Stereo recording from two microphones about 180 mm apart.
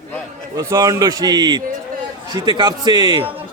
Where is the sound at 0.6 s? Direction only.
20° right (ahead or behind).